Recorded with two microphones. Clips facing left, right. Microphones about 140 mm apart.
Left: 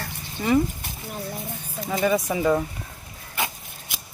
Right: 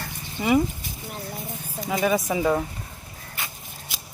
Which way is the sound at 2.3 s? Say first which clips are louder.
Left 1 dB; 10° right (ahead or behind).